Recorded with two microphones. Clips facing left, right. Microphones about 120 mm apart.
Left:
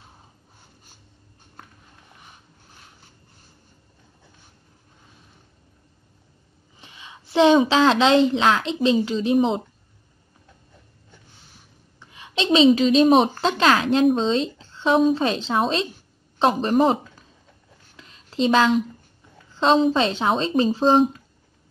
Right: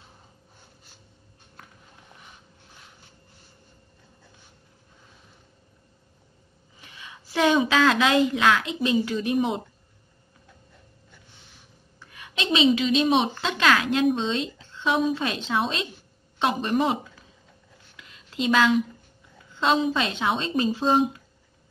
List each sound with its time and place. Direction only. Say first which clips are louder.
6.8 s a woman's voice: left 1 dB; 25° left (ahead or behind)
12.0 s a woman's voice: left 5 dB; 25° left (ahead or behind)
17.9 s a sound: left 5 dB; 30° left (ahead or behind)
19.5 s speech: left 5 dB; 30° left (ahead or behind)